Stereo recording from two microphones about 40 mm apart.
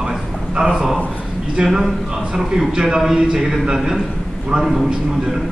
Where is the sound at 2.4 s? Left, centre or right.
Centre.